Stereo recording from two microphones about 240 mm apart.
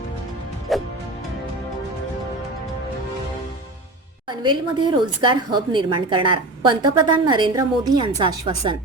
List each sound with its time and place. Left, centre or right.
0.7 s music: centre
4.3 s a woman's voice: centre